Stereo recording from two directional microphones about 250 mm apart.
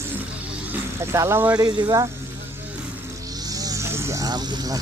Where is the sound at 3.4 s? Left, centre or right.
Centre.